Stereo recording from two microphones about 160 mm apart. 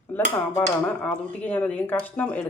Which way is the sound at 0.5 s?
10° left (ahead or behind).